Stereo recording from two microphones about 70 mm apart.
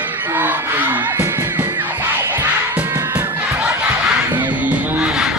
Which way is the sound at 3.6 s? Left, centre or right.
Right.